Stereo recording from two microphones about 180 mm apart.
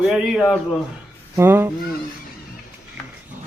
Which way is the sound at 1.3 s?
15° right (ahead or behind).